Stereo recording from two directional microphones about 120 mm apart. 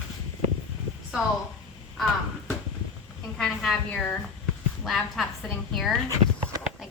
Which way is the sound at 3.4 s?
5° left (ahead or behind).